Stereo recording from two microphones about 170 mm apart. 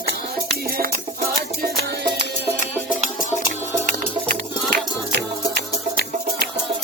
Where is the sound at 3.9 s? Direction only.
65° right (ahead or behind).